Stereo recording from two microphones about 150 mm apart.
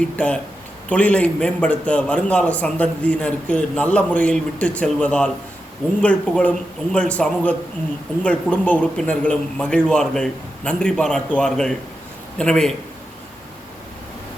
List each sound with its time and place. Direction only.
0.2 s a man's voice: 10° left (ahead or behind)